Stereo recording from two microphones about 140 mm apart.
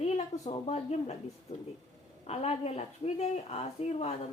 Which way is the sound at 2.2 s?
50° left (ahead or behind).